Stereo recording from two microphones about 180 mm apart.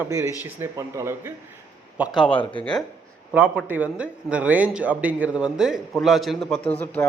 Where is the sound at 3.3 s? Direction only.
10° right (ahead or behind).